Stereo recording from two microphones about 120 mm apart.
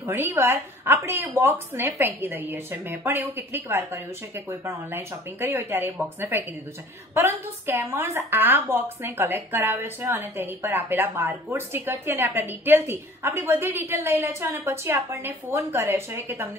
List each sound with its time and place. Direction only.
0.0 s a woman's voice: 20° right (ahead or behind)